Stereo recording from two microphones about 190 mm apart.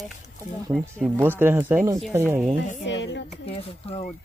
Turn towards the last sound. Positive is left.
turn(degrees=70)  # may be behind; listen again after turning